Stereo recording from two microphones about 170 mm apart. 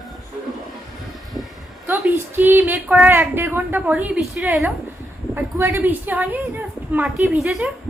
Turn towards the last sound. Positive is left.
turn(degrees=-5)  # may be behind; listen again after turning